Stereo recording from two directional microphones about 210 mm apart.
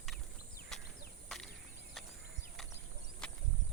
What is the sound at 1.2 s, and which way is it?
Cricket, centre (ahead or behind).